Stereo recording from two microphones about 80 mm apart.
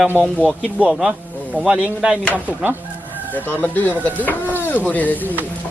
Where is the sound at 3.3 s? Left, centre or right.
Left.